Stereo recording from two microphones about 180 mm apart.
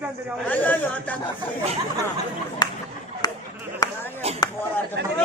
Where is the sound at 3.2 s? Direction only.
20° left (ahead or behind).